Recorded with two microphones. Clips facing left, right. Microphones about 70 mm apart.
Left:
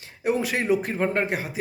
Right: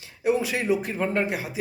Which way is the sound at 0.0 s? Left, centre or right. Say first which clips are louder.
Right 1 dB; left.